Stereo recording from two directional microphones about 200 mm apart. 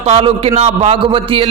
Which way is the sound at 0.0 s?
25° right (ahead or behind).